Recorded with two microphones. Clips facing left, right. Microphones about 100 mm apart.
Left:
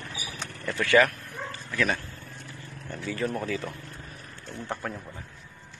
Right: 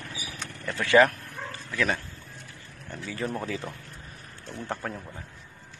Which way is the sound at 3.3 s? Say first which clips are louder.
Left 2 dB; 10° right (ahead or behind).